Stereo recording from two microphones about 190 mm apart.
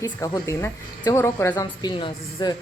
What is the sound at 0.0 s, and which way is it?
A woman's voice, 15° left (ahead or behind).